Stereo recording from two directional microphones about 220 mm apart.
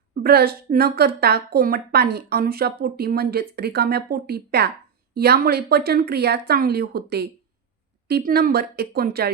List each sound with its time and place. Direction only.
0.1 s speech: 45° right (ahead or behind)